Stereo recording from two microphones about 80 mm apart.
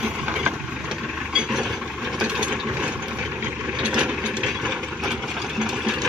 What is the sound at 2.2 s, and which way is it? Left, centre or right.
Ratchet, centre.